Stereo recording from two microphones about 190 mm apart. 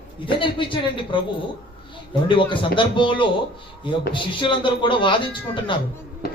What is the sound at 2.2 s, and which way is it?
A man's voice, 25° left (ahead or behind).